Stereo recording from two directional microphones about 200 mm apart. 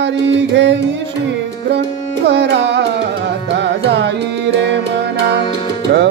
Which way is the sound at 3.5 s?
60° right (ahead or behind).